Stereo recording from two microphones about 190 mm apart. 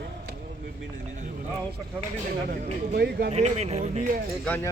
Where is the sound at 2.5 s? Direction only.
55° right (ahead or behind).